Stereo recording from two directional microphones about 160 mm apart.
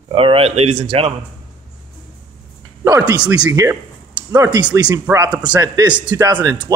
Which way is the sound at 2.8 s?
20° right (ahead or behind).